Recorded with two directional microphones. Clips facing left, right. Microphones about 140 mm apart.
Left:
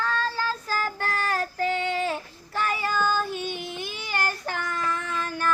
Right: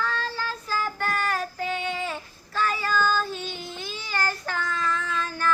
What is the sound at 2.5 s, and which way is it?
Child singing, 20° left (ahead or behind).